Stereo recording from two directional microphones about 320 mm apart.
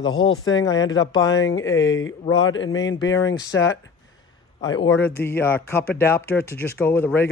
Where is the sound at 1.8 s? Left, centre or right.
Left.